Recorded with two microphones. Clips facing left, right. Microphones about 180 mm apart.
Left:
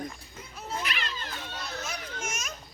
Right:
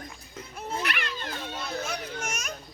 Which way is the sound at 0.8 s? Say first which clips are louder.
Right 3 dB; 60° right (ahead or behind).